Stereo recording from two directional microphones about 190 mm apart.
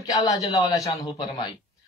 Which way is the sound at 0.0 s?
20° left (ahead or behind).